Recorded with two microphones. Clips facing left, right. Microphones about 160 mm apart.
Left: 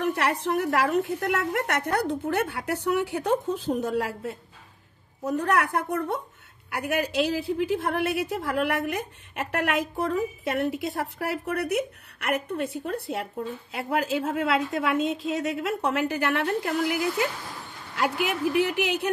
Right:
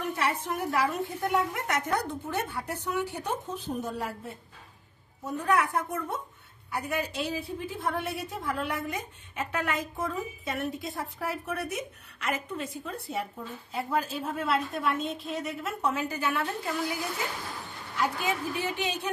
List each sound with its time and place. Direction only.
0.1 s a woman's voice: 75° left (ahead or behind); by 4.4 s 90° left
5.2 s a woman's voice: 75° left (ahead or behind)